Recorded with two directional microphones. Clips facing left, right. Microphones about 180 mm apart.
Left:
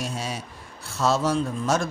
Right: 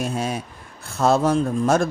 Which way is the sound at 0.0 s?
55° right (ahead or behind).